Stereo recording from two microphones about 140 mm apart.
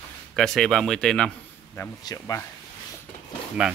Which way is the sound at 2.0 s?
25° left (ahead or behind).